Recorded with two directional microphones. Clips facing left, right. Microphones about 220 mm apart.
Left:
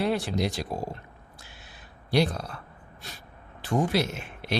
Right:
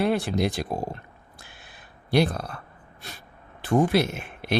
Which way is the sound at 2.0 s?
55° right (ahead or behind).